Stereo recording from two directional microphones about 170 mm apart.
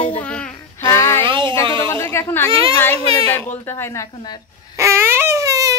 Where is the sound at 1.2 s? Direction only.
30° right (ahead or behind).